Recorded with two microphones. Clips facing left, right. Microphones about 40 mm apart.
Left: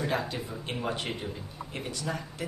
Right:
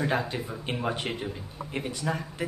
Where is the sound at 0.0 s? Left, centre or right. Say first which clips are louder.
Right 3 dB; centre.